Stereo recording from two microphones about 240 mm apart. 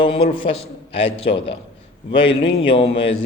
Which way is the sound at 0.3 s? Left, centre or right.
Left.